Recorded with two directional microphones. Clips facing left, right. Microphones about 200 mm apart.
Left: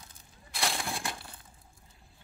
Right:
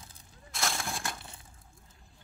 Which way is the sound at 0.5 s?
Centre (ahead or behind).